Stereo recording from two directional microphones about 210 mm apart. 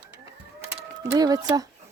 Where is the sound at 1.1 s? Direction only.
15° right (ahead or behind).